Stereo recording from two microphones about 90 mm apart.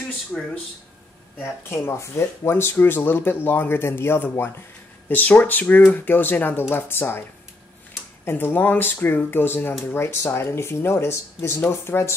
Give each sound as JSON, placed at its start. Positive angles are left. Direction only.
{"t": 0.3, "sound": "speech", "side_deg": 10}
{"t": 1.4, "sound": "speech", "side_deg": 30}
{"t": 8.3, "sound": "speech", "side_deg": 25}